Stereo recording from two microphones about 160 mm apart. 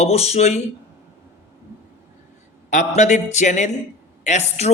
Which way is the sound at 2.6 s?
50° left (ahead or behind).